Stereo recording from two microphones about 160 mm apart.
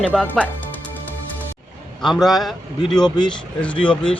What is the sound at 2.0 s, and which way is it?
A man's voice, centre (ahead or behind).